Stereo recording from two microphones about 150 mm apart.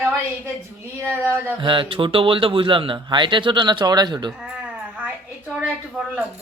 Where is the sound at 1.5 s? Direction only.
35° right (ahead or behind).